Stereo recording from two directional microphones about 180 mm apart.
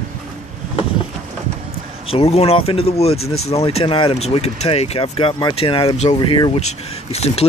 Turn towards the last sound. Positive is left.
turn(degrees=35)  # may be behind; listen again after turning